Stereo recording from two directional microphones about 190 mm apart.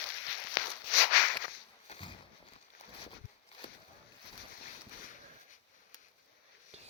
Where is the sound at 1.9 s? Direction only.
25° left (ahead or behind).